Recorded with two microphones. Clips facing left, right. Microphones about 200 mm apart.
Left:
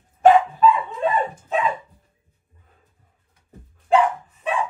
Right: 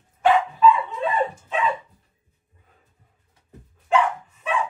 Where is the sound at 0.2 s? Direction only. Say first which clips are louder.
Left 3 dB; 45° left (ahead or behind).